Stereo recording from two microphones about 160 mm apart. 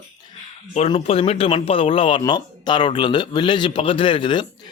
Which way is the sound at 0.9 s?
35° left (ahead or behind).